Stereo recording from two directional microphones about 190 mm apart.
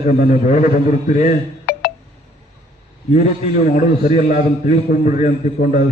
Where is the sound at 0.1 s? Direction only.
45° left (ahead or behind).